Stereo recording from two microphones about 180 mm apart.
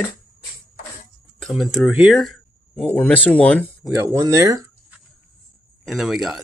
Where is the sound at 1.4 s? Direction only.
Centre (ahead or behind).